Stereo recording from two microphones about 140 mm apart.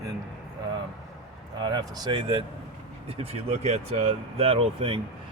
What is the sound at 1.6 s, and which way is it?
Speech, 30° right (ahead or behind).